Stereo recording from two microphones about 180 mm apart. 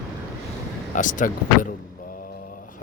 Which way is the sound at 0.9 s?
45° left (ahead or behind).